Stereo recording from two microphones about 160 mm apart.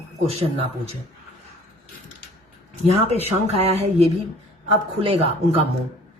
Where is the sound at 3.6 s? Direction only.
40° right (ahead or behind).